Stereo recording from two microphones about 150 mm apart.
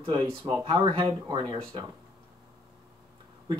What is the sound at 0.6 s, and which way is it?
Speech, 30° right (ahead or behind).